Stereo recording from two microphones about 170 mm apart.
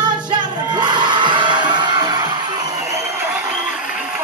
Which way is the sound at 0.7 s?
25° right (ahead or behind).